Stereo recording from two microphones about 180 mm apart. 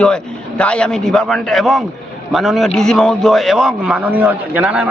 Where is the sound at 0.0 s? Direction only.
5° left (ahead or behind).